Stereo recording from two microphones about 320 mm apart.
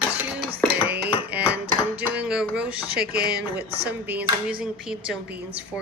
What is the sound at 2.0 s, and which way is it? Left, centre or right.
Speech, centre.